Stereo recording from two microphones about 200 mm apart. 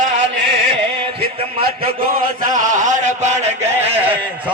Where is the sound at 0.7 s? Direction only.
30° right (ahead or behind).